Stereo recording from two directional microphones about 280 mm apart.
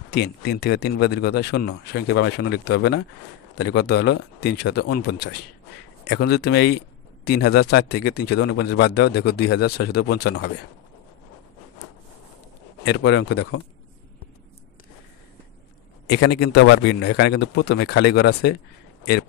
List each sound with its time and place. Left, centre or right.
0.1 s a man's voice: left
12.8 s a man's voice: left
16.1 s a man's voice: left